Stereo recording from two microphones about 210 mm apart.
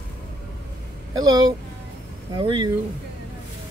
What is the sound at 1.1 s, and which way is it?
Speech, 20° right (ahead or behind).